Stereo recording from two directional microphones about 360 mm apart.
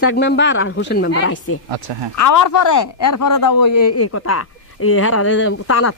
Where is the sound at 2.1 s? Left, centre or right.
Left.